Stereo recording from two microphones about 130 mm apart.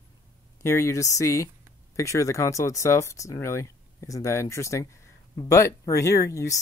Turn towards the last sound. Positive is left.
turn(degrees=25)  # may be behind; listen again after turning